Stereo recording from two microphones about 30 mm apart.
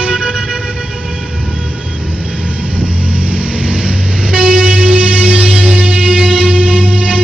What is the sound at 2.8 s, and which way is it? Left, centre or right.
Vehicle, right.